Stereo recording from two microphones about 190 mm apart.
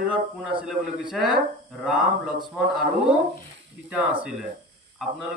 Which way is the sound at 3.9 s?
5° right (ahead or behind).